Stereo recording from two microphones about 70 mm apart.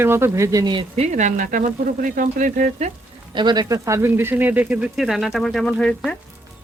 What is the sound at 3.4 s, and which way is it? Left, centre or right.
Speech, right.